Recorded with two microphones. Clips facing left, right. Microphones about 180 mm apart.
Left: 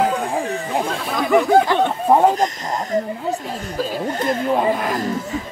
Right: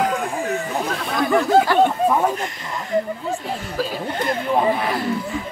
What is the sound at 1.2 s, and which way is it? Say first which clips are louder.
Speech: left 2 dB; 20° left (ahead or behind).